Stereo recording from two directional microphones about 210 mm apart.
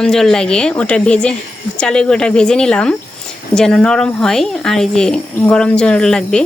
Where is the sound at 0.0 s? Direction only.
Centre (ahead or behind).